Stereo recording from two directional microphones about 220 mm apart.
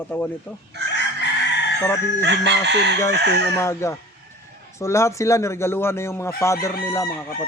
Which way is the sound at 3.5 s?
15° left (ahead or behind).